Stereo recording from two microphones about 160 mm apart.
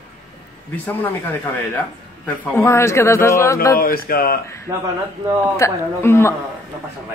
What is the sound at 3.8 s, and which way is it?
Speech, 65° left (ahead or behind).